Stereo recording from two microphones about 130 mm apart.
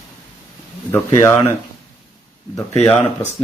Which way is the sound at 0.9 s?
20° left (ahead or behind).